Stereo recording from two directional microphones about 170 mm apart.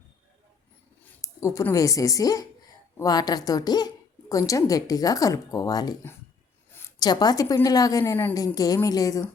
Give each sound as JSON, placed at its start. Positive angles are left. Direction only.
{"t": 1.2, "sound": "a woman's voice", "side_deg": 20}